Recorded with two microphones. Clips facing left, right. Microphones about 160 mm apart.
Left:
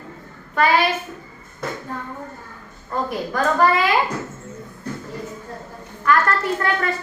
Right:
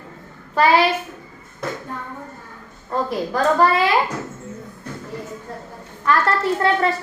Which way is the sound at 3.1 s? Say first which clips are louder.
Right 3 dB; 30° right (ahead or behind).